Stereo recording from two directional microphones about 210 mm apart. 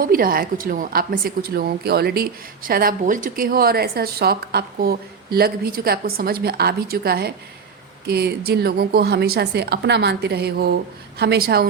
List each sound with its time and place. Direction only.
0.0 s a woman's voice: 45° right (ahead or behind)